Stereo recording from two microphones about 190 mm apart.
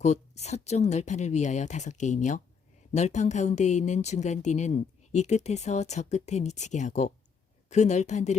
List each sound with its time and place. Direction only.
0.0 s speech: 35° left (ahead or behind)